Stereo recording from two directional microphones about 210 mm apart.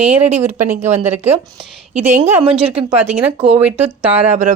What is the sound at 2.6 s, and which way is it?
Speech, 5° right (ahead or behind).